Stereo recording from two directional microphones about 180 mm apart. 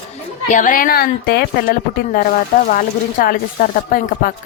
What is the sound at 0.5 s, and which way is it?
Speech, 45° left (ahead or behind).